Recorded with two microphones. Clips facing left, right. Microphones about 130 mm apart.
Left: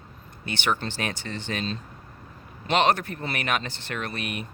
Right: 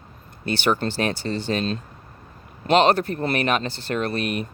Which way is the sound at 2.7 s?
35° right (ahead or behind).